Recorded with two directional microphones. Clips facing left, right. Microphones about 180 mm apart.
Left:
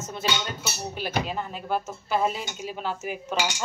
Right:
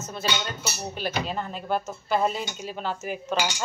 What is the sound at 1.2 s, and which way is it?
A woman's voice, 5° left (ahead or behind).